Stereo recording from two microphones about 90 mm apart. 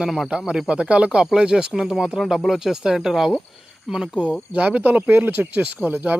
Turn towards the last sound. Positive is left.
turn(degrees=-20)  # may be behind; listen again after turning